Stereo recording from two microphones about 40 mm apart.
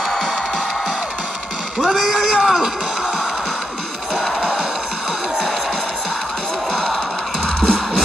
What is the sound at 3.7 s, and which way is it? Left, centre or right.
Music, centre.